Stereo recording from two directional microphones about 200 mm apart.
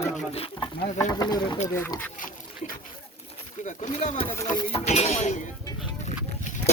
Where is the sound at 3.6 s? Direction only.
35° left (ahead or behind).